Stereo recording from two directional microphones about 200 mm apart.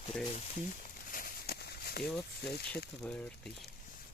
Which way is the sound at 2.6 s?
50° left (ahead or behind).